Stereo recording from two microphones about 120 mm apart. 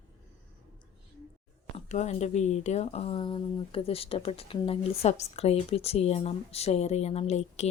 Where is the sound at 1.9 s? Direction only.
70° left (ahead or behind).